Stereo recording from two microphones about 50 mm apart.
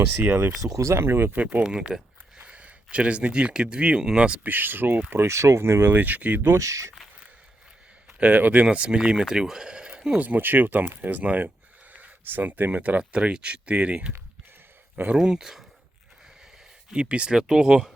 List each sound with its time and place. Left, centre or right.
0.8 s speech: right
1.3 s speech: right
1.6 s speech: centre
2.4 s speech: right
4.4 s speech: right
5.1 s speech: right
5.9 s speech: right
6.6 s speech: right
8.2 s speech: right
8.6 s speech: centre
10.2 s speech: right
13.0 s speech: centre
15.1 s speech: centre
16.9 s speech: centre